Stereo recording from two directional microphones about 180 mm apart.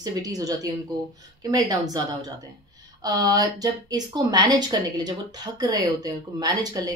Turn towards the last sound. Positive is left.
turn(degrees=-20)  # may be behind; listen again after turning